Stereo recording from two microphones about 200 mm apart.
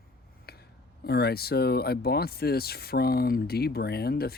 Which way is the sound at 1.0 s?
50° left (ahead or behind).